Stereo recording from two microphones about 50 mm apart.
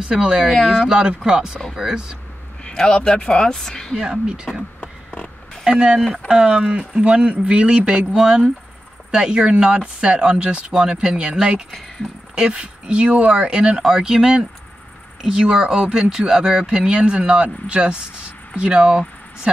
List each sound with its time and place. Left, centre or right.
0.0 s speech: centre
2.6 s speech: centre
3.9 s speech: centre
4.7 s a sound: left
5.7 s speech: centre